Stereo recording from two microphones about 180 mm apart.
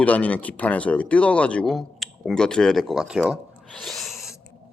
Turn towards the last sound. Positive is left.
turn(degrees=0)  # may be behind; listen again after turning